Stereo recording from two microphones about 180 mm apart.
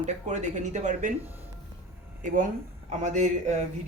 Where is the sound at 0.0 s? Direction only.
40° right (ahead or behind).